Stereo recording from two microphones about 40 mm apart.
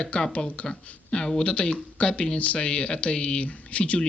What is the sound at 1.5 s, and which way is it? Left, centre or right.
Speech, left.